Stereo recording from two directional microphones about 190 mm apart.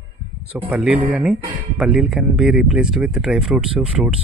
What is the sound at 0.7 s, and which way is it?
Speech, 5° right (ahead or behind).